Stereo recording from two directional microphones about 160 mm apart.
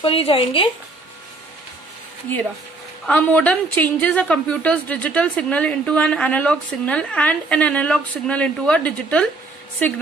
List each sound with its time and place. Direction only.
0.0 s speech: 35° left (ahead or behind)
3.1 s a woman's voice: 10° left (ahead or behind)